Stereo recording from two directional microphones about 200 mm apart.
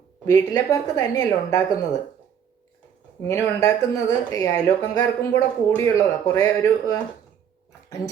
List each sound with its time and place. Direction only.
0.3 s speech: 15° left (ahead or behind)
3.2 s speech: 15° left (ahead or behind)